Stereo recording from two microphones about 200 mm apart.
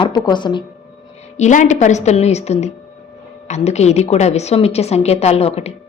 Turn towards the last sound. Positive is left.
turn(degrees=30)  # may be behind; listen again after turning